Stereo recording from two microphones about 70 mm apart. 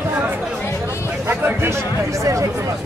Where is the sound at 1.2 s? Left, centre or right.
Right.